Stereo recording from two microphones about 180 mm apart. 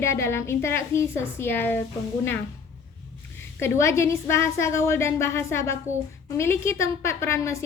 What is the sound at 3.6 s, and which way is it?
A woman's voice, 15° left (ahead or behind).